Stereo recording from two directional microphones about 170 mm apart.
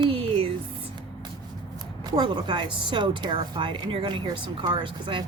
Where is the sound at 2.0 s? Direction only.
25° right (ahead or behind).